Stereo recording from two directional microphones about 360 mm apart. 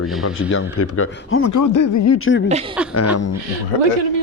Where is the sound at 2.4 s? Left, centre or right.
Centre.